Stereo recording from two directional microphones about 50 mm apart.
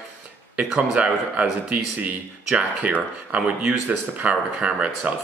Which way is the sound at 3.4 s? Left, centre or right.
Centre.